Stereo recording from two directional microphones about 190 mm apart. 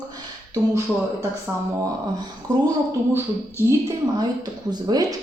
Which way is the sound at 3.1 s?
15° right (ahead or behind).